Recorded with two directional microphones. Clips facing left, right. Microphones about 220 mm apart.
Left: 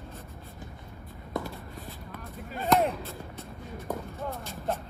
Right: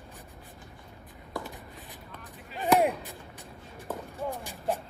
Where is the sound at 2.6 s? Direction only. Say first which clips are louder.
Right 1 dB; 15° right (ahead or behind).